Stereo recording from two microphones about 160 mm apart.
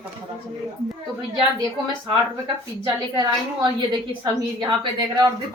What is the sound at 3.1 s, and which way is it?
A woman's voice, 25° right (ahead or behind).